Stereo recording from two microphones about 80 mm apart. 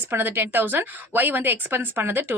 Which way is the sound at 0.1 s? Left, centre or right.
Right.